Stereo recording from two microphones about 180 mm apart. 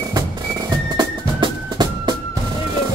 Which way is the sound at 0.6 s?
20° right (ahead or behind).